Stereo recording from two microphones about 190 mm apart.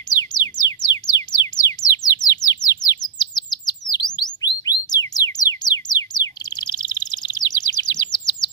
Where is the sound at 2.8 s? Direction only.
20° left (ahead or behind).